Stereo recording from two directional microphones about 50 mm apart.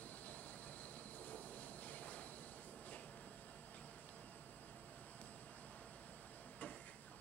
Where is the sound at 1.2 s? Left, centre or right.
Left.